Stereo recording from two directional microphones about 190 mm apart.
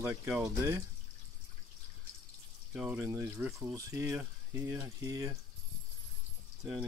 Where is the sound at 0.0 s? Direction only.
15° right (ahead or behind).